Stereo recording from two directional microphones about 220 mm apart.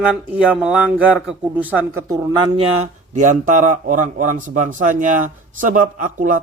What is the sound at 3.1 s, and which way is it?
A man's voice, 35° right (ahead or behind).